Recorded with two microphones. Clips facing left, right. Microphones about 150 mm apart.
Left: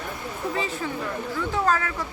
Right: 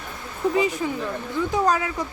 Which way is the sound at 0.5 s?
15° right (ahead or behind).